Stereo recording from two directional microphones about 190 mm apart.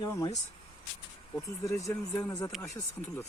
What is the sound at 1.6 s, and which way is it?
Speech, 15° left (ahead or behind).